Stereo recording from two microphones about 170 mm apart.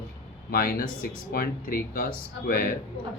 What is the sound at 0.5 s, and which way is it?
Speech, 60° left (ahead or behind).